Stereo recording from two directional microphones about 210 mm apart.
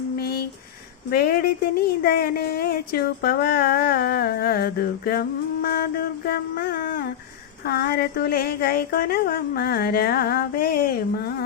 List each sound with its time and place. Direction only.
0.2 s a sound: 50° left (ahead or behind)
1.1 s speech: 45° left (ahead or behind)
5.6 s music: 45° left (ahead or behind)
7.6 s speech: 45° left (ahead or behind)